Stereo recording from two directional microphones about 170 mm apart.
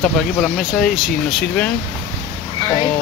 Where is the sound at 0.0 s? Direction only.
5° left (ahead or behind).